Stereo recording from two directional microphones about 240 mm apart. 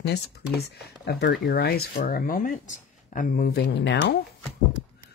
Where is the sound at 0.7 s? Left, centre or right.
Left.